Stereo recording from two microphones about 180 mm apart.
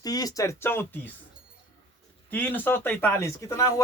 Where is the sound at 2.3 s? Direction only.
10° left (ahead or behind).